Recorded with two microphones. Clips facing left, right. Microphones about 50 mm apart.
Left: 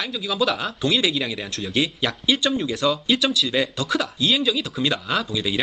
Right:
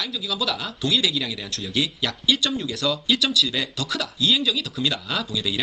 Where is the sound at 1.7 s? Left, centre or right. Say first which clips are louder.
Left 2 dB; centre.